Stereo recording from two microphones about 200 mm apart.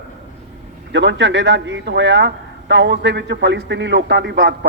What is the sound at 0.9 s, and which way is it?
A man's voice, 60° right (ahead or behind).